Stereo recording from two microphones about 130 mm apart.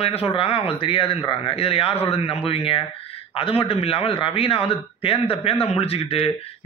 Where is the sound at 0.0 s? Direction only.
50° left (ahead or behind).